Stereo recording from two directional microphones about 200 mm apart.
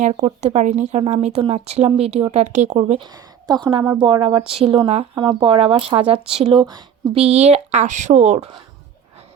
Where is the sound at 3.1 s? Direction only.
20° right (ahead or behind).